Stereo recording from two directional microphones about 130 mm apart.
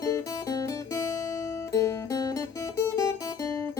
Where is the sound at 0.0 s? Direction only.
30° left (ahead or behind).